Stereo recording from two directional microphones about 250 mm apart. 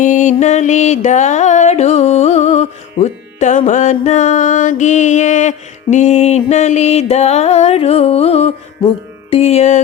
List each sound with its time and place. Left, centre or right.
0.0 s mantra: left